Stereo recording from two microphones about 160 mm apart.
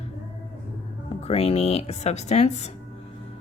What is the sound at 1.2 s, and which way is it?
Speech, 40° left (ahead or behind).